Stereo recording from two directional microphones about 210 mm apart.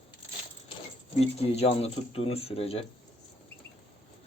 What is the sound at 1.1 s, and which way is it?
Speech, 30° left (ahead or behind).